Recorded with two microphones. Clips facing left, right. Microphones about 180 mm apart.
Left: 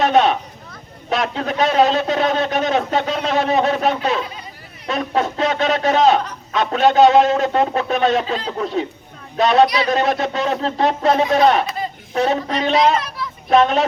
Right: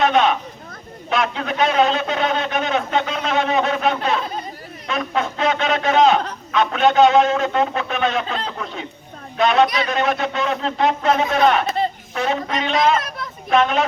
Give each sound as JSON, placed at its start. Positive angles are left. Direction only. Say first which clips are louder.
{"t": 0.0, "sound": "a sound", "louder": "left 2 dB", "side_deg": 40}
{"t": 1.1, "sound": "a man's voice", "louder": "left 1 dB", "side_deg": 35}
{"t": 13.0, "sound": "children playing", "louder": "left 1 dB", "side_deg": -50}
{"t": 13.5, "sound": "a man's voice", "louder": "left 3 dB", "side_deg": 35}